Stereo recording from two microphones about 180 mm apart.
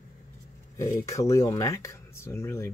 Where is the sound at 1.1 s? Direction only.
15° left (ahead or behind).